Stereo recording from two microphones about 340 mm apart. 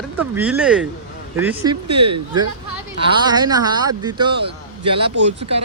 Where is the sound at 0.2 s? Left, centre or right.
Centre.